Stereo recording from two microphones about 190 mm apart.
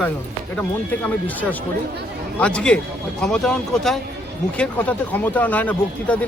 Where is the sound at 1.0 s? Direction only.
10° left (ahead or behind).